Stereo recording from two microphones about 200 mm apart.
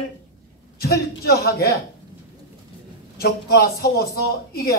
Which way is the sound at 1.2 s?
50° left (ahead or behind).